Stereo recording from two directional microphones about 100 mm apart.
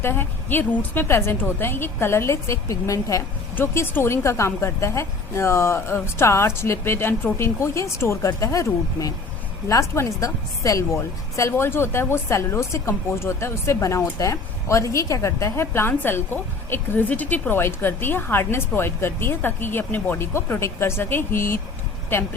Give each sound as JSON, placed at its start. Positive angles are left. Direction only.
{"t": 0.0, "sound": "a woman's voice", "side_deg": 20}
{"t": 3.5, "sound": "a woman's voice", "side_deg": 20}